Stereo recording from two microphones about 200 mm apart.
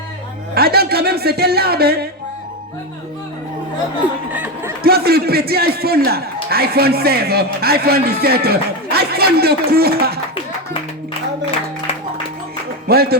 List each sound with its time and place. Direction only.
0.5 s a man's voice: 50° right (ahead or behind)
4.3 s speech: 10° right (ahead or behind)
4.8 s a man's voice: 50° right (ahead or behind)
12.9 s a man's voice: 50° right (ahead or behind)